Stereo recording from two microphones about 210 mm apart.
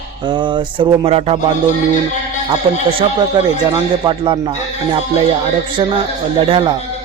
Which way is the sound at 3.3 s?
20° right (ahead or behind).